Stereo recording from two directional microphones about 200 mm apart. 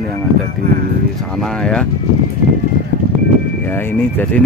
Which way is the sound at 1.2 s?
5° left (ahead or behind).